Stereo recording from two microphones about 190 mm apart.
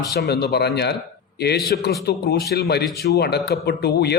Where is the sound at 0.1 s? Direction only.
60° left (ahead or behind).